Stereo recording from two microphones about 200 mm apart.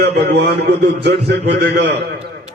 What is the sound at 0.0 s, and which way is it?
A man's voice, 55° right (ahead or behind).